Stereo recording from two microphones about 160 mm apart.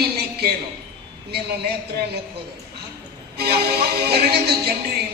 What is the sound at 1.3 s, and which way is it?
Speech, 85° right.